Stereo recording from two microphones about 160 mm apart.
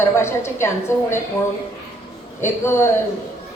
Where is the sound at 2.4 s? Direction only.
15° left (ahead or behind).